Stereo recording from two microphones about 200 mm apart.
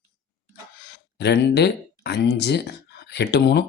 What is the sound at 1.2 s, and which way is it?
Speech, 60° left (ahead or behind).